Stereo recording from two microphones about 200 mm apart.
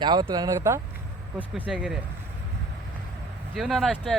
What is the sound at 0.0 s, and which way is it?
Speech, 20° right (ahead or behind).